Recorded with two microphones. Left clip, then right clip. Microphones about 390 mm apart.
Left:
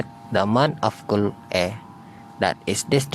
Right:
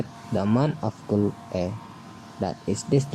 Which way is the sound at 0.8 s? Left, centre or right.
Left.